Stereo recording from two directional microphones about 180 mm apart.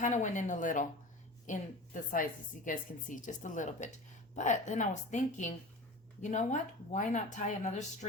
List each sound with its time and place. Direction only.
0.0 s speech: 45° left (ahead or behind)